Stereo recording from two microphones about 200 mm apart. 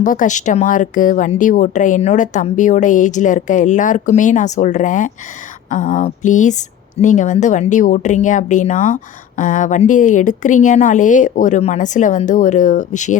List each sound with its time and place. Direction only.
0.0 s a woman's voice: 40° left (ahead or behind)